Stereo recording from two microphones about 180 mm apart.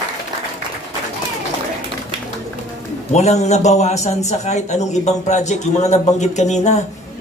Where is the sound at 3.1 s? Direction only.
40° left (ahead or behind).